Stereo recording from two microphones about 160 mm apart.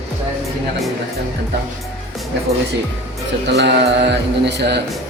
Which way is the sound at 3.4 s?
90° right.